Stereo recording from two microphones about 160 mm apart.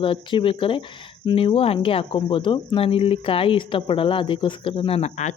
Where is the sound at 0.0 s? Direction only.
30° left (ahead or behind).